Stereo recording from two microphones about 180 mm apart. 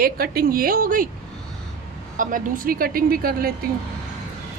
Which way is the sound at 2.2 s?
50° right (ahead or behind).